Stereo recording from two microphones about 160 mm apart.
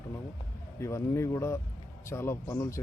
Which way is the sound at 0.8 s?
15° left (ahead or behind).